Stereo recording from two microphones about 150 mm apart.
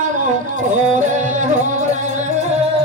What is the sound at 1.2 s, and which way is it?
Music, 55° right (ahead or behind).